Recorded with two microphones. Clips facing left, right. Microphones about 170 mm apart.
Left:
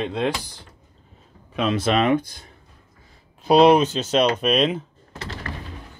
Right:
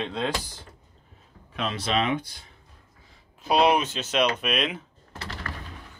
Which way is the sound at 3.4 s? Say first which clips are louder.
Left 7 dB; 35° left (ahead or behind).